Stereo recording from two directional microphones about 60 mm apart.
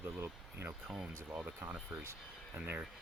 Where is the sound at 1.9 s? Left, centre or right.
Centre.